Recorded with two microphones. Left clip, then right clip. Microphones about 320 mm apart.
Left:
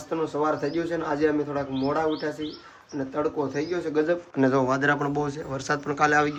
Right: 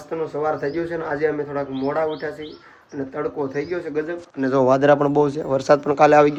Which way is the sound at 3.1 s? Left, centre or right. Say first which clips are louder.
Right 2 dB; centre.